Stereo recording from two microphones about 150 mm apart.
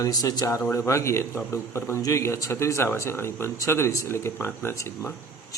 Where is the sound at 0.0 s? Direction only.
25° left (ahead or behind).